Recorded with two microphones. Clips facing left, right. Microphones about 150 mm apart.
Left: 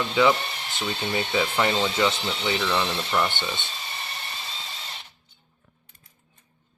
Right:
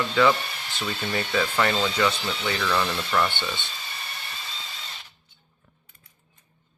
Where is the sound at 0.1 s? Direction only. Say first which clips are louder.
Left 1 dB; 25° left (ahead or behind).